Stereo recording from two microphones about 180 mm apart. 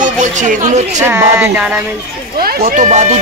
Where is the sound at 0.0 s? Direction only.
45° right (ahead or behind).